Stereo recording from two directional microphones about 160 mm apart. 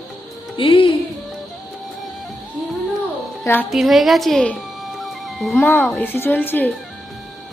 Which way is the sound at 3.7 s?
Centre (ahead or behind).